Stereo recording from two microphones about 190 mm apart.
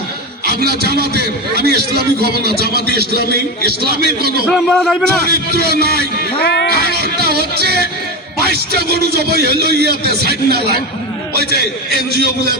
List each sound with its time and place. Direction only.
0.4 s a man's voice: 55° right (ahead or behind)
4.5 s a man's voice: centre (ahead or behind)
5.2 s a man's voice: 55° right (ahead or behind)
6.4 s speech: 60° left (ahead or behind)
6.9 s a man's voice: 55° right (ahead or behind)